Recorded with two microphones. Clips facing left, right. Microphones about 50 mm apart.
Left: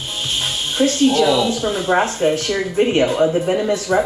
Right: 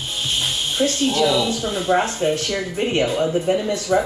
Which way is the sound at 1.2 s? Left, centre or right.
Centre.